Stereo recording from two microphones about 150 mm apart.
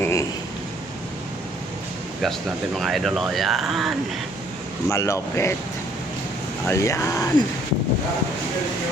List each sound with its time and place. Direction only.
0.0 s a sound: 20° left (ahead or behind)
2.7 s speech: centre (ahead or behind)
4.9 s speech: 20° left (ahead or behind)
6.7 s speech: 20° left (ahead or behind)